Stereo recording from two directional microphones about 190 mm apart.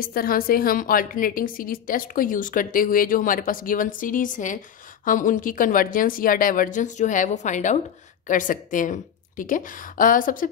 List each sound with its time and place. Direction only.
0.0 s a woman's voice: 50° left (ahead or behind)